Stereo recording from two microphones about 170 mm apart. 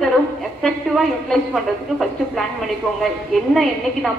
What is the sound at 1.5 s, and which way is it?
Speech, centre (ahead or behind).